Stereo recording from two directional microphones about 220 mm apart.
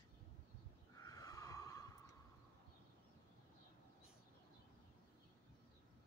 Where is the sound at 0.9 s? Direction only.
15° left (ahead or behind).